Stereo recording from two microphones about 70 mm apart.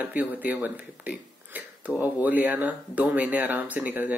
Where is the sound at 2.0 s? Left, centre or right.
Right.